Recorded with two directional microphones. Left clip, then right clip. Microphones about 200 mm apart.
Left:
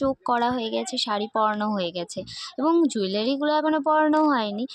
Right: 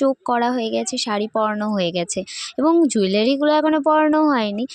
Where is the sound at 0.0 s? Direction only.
35° right (ahead or behind).